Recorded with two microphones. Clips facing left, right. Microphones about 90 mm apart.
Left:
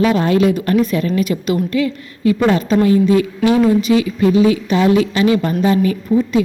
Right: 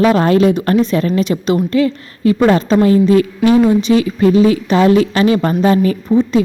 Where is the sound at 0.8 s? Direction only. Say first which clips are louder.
Right 2 dB; 25° right (ahead or behind); by 6.0 s 45° right (ahead or behind).